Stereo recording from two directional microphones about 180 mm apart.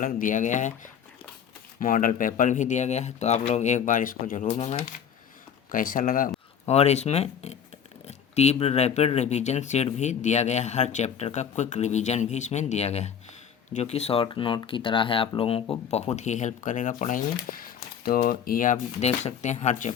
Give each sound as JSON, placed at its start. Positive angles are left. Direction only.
{"t": 0.0, "sound": "speech", "side_deg": 45}
{"t": 5.7, "sound": "speech", "side_deg": 50}
{"t": 6.7, "sound": "speech", "side_deg": 35}